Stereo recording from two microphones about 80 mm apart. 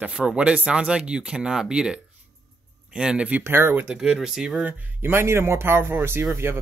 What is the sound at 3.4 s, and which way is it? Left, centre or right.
Speech, right.